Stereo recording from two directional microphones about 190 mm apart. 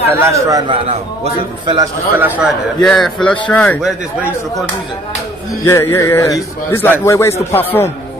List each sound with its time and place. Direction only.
0.2 s a man's voice: 15° right (ahead or behind)
0.8 s a man's voice: 35° right (ahead or behind)
2.1 s a man's voice: 10° right (ahead or behind); by 3.8 s 10° left (ahead or behind)
3.8 s a man's voice: centre (ahead or behind)
5.6 s a man's voice: 15° left (ahead or behind)